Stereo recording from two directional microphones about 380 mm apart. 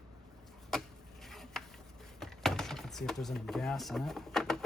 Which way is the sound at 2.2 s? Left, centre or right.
Centre.